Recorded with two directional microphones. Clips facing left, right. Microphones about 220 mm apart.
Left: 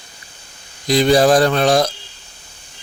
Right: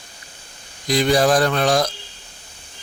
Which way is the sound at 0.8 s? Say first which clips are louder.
Left 4 dB; 30° left (ahead or behind).